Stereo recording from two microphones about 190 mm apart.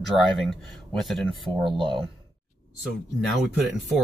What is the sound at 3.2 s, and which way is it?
Speech, centre (ahead or behind).